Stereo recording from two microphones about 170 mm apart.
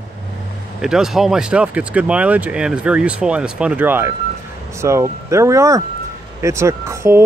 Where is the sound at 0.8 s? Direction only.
5° right (ahead or behind).